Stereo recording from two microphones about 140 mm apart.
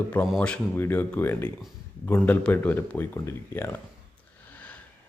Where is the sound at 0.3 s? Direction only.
5° left (ahead or behind).